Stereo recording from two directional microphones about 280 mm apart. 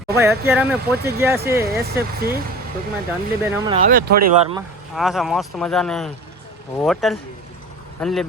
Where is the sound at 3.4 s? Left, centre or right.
Centre.